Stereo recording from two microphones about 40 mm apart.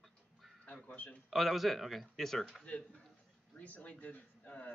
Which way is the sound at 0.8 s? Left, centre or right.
Left.